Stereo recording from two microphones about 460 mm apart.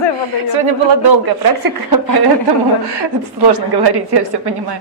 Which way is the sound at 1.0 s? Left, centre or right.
Right.